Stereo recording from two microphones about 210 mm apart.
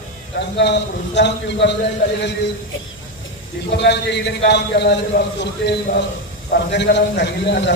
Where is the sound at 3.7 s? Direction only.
55° left (ahead or behind).